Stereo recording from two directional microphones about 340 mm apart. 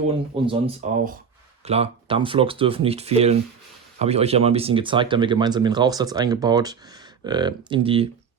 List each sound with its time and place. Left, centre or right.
0.4 s speech: centre